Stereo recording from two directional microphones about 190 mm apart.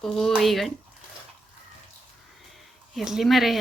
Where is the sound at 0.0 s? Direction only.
Centre (ahead or behind).